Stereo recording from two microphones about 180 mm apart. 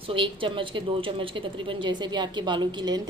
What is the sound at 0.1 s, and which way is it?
A woman's voice, 30° right (ahead or behind).